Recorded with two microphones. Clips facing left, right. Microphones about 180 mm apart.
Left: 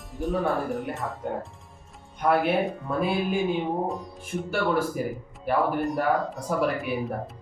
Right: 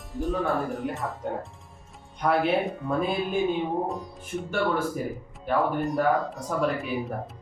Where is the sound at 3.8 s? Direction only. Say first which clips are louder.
Left 1 dB; centre (ahead or behind).